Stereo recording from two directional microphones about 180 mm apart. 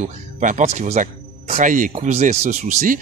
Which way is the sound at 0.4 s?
45° right (ahead or behind).